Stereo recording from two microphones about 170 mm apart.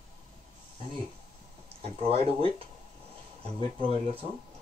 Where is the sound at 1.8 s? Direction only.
35° right (ahead or behind).